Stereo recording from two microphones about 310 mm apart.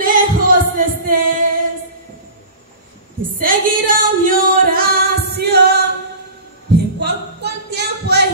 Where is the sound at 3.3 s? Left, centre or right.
Right.